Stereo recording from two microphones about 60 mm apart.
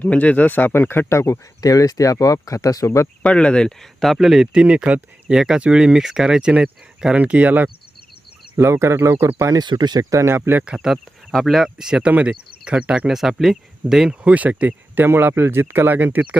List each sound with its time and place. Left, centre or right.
0.0 s speech: left
1.6 s speech: left
3.2 s speech: centre
4.0 s speech: centre
4.5 s speech: centre
7.2 s speech: right
8.5 s speech: right
10.2 s speech: right
10.8 s speech: centre
13.1 s speech: centre
14.3 s speech: right
15.0 s speech: right